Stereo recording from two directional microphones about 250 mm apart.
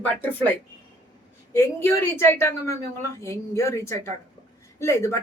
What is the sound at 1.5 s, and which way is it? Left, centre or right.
A woman's voice, centre.